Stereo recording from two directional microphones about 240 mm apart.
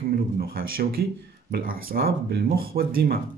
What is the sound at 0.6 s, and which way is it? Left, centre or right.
Speech, right.